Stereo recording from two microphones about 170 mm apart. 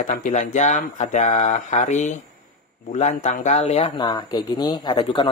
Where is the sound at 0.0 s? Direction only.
50° left (ahead or behind).